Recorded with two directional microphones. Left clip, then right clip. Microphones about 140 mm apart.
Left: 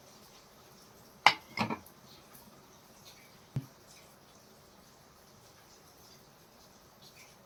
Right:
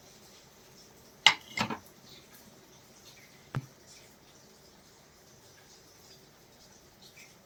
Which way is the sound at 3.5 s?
Centre (ahead or behind).